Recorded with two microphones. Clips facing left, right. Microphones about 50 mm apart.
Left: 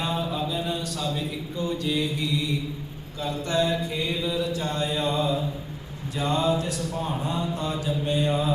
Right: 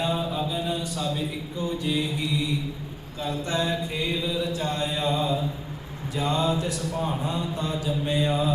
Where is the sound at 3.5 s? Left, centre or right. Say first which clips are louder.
Left 4 dB; right.